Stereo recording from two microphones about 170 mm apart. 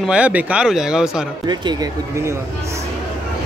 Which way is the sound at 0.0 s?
5° right (ahead or behind).